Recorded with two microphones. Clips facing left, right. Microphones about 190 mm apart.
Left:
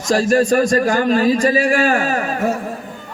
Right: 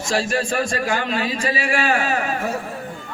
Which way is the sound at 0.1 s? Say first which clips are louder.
Left 8 dB; 40° left (ahead or behind).